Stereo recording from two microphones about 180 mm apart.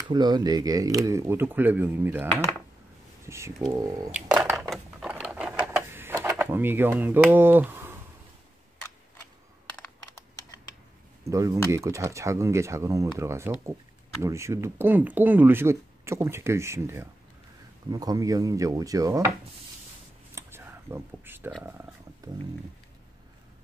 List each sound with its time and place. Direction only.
0.1 s speech: 25° right (ahead or behind)
4.1 s a sound: 10° right (ahead or behind)
7.2 s speech: 10° right (ahead or behind)
11.2 s speech: 15° right (ahead or behind)
20.3 s a sound: 15° right (ahead or behind)
21.6 s speech: 15° right (ahead or behind)